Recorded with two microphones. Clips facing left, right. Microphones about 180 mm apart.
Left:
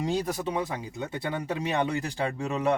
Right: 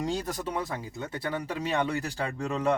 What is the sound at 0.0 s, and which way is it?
Speech, 10° left (ahead or behind).